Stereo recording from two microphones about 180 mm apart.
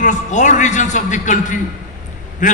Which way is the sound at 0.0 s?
40° left (ahead or behind).